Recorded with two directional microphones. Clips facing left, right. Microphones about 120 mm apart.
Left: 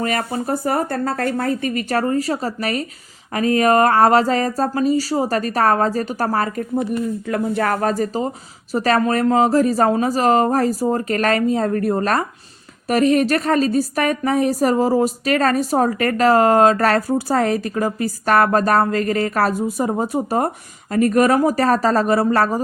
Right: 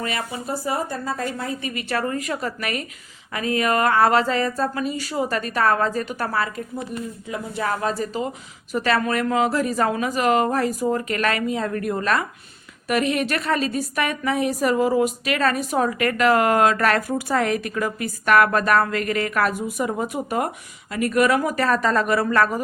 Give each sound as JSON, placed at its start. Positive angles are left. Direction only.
{"t": 0.0, "sound": "a woman's voice", "side_deg": 45}
{"t": 7.3, "sound": "a woman's voice", "side_deg": 60}